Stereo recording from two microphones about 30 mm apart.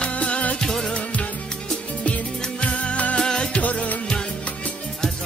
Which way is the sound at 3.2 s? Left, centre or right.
Left.